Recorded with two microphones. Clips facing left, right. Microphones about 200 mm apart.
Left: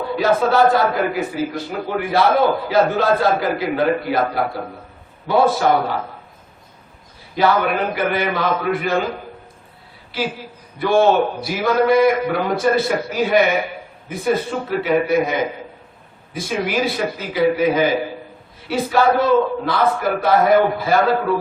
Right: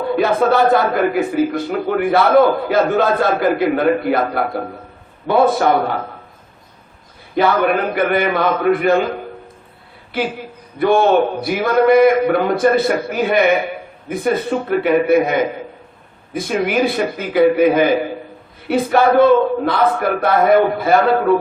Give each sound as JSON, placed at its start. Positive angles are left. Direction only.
{"t": 0.2, "sound": "a man's voice", "side_deg": -55}
{"t": 7.3, "sound": "a man's voice", "side_deg": -55}
{"t": 10.1, "sound": "a man's voice", "side_deg": -55}
{"t": 14.7, "sound": "a man's voice", "side_deg": -55}